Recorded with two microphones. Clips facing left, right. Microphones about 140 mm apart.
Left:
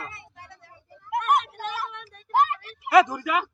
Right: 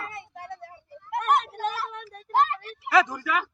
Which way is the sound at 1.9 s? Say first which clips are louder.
Right 4 dB; 40° right (ahead or behind).